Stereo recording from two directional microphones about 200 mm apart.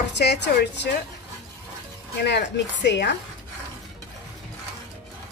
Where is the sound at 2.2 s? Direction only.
55° left (ahead or behind).